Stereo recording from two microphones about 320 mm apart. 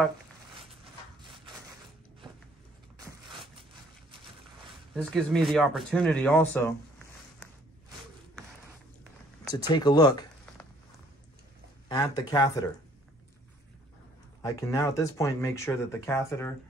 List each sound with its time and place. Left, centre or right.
1.2 s a sound: centre
4.9 s speech: centre
9.5 s speech: centre
11.9 s speech: centre
14.4 s speech: centre